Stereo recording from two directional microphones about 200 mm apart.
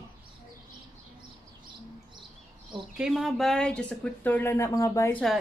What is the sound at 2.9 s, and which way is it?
Speech, centre (ahead or behind).